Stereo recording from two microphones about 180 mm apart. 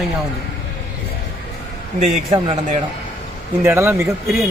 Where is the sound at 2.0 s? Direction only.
35° right (ahead or behind).